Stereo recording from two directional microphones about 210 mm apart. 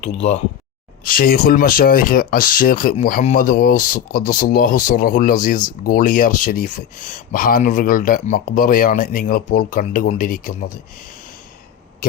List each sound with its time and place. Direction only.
0.0 s speech: 35° left (ahead or behind)
1.0 s speech: 45° left (ahead or behind)